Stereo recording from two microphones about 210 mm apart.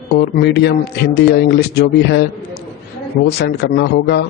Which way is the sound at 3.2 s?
50° left (ahead or behind).